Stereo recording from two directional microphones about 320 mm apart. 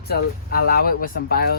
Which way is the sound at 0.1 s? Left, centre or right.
Left.